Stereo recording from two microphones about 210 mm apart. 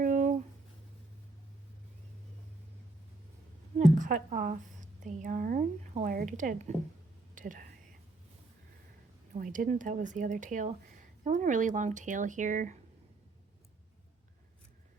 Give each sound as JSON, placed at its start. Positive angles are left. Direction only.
{"t": 0.0, "sound": "a sound", "side_deg": -35}
{"t": 3.8, "sound": "a woman's voice", "side_deg": -35}
{"t": 9.3, "sound": "speech", "side_deg": -40}